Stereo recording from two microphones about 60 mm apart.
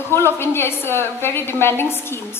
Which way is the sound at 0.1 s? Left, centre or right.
Left.